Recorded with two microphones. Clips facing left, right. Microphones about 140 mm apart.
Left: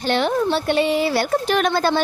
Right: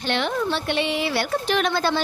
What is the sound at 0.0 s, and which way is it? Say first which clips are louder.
A woman's voice: left 5 dB; 40° left (ahead or behind).